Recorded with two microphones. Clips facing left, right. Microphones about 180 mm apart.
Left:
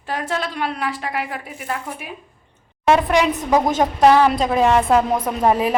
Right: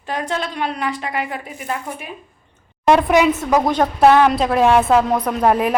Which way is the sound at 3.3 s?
15° left (ahead or behind).